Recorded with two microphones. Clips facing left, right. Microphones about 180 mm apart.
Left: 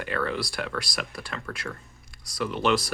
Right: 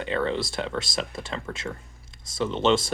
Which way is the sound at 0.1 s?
25° right (ahead or behind).